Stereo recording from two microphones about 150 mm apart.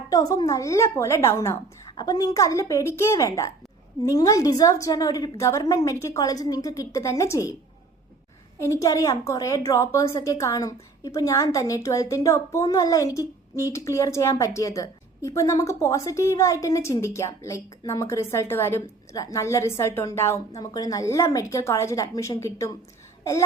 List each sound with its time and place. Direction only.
0.1 s a woman's voice: 25° left (ahead or behind)
8.5 s a woman's voice: 20° left (ahead or behind)